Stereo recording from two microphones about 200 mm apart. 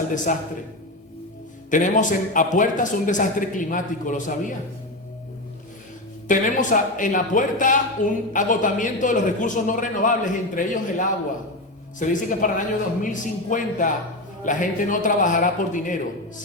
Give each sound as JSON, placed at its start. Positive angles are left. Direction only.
{"t": 0.3, "sound": "a man's voice", "side_deg": 40}
{"t": 1.7, "sound": "a man's voice", "side_deg": 40}
{"t": 6.2, "sound": "a man's voice", "side_deg": 40}